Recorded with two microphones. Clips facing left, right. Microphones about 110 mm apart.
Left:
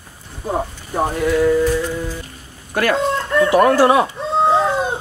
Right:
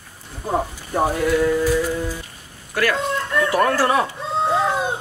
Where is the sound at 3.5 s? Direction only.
20° left (ahead or behind).